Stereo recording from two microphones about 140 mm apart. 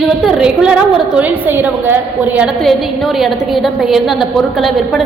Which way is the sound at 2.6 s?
Centre (ahead or behind).